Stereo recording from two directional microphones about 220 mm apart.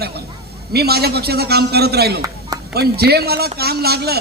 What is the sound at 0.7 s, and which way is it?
A man's voice, 45° right (ahead or behind).